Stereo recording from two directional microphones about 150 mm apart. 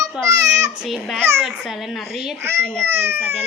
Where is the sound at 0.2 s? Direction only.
5° right (ahead or behind).